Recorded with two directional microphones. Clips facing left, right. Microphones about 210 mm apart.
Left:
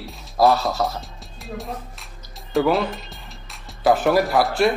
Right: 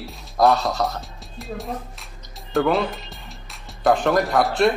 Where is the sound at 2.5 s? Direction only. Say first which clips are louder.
Left 1 dB; centre (ahead or behind).